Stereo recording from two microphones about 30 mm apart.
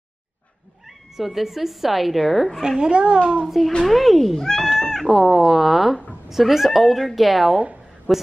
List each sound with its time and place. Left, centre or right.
0.8 s speech: centre
2.8 s a child's voice: right
3.4 s speech: centre
4.4 s speech: centre
5.0 s a woman's voice: centre